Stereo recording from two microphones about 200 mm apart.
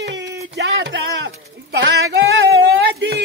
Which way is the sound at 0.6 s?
60° right (ahead or behind).